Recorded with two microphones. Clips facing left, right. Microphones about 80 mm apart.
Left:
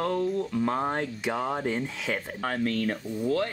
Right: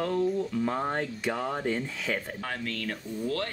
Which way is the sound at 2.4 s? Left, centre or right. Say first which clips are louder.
Left 7 dB; left.